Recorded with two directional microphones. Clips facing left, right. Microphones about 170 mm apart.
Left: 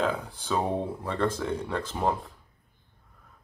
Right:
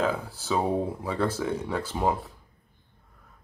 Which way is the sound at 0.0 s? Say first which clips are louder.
Right 1 dB; 5° right (ahead or behind).